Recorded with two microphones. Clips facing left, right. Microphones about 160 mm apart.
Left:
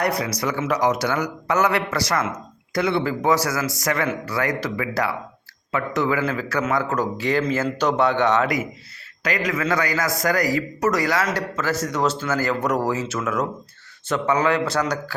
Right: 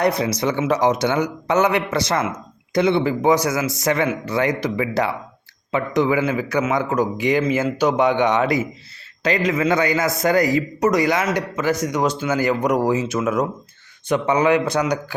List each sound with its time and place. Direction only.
0.0 s a man's voice: 25° right (ahead or behind)
9.2 s a man's voice: 25° right (ahead or behind)